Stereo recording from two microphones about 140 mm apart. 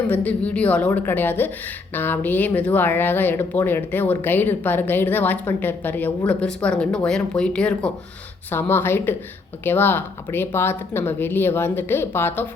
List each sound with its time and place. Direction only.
0.1 s speech: 10° left (ahead or behind)